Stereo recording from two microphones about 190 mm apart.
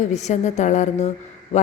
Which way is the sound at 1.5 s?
35° left (ahead or behind).